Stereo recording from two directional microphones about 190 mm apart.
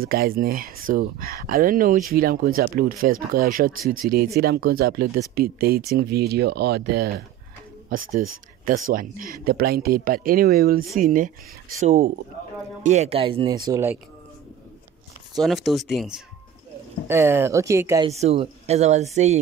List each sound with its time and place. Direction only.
0.0 s speech: 50° right (ahead or behind)
7.9 s speech: 45° right (ahead or behind); by 13.6 s 25° right (ahead or behind)
13.7 s speech: 15° right (ahead or behind)
15.4 s speech: centre (ahead or behind)
17.1 s speech: 10° right (ahead or behind)
18.1 s speech: 35° right (ahead or behind)